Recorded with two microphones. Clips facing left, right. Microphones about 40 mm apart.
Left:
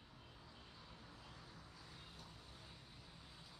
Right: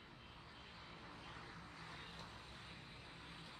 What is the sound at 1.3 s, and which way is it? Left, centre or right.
Vehicle, right.